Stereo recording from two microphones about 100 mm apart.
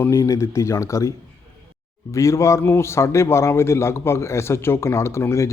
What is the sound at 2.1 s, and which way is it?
Speech, 30° left (ahead or behind).